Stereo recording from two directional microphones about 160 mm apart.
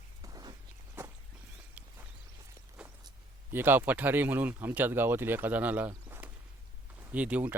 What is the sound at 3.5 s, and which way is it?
Speech, 15° right (ahead or behind).